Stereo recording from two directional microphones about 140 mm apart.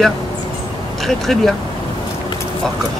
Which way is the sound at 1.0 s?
Centre (ahead or behind).